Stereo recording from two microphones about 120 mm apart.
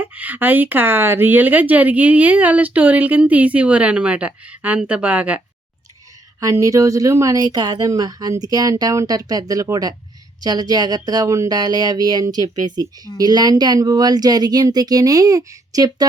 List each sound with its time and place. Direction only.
0.0 s speech: 15° right (ahead or behind)
6.4 s speech: 25° right (ahead or behind)